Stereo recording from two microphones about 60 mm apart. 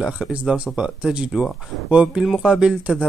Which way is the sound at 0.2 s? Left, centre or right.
Centre.